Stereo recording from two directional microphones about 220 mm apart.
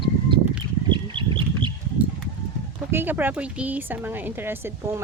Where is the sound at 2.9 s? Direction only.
10° right (ahead or behind).